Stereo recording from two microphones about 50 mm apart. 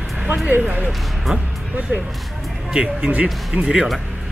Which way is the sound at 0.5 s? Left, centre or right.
Right.